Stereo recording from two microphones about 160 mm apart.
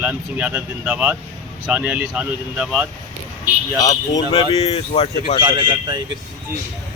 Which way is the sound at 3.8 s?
25° left (ahead or behind).